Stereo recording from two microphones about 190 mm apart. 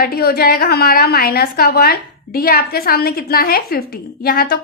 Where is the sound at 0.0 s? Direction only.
55° left (ahead or behind).